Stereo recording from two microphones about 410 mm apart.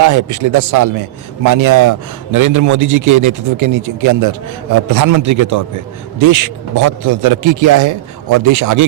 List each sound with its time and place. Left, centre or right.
0.0 s a man's voice: right